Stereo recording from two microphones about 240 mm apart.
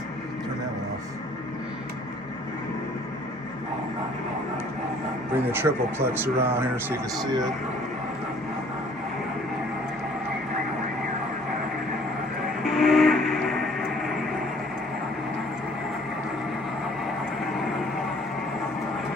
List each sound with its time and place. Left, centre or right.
5.4 s speech: centre
12.6 s train: centre